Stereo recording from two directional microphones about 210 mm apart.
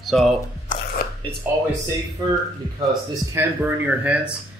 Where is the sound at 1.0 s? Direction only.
45° left (ahead or behind).